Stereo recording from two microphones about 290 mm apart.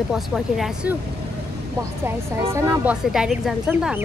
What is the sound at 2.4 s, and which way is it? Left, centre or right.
Speech, centre.